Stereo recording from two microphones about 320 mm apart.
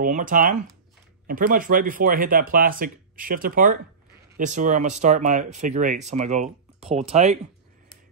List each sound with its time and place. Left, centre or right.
0.0 s speech: right